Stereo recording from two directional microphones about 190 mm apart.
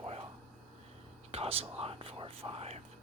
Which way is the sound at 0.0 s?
35° right (ahead or behind).